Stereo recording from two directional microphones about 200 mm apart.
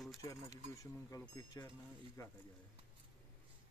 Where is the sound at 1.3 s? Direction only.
15° left (ahead or behind).